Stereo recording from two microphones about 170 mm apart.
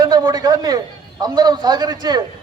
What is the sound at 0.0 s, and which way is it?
A man's voice, 25° right (ahead or behind).